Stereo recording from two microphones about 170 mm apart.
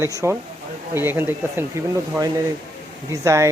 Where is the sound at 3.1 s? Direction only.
15° right (ahead or behind).